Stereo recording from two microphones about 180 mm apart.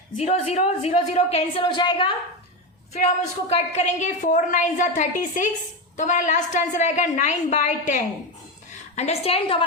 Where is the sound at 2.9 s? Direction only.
35° left (ahead or behind).